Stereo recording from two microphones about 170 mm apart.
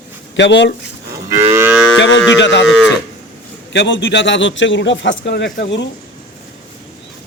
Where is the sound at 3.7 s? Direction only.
90° left.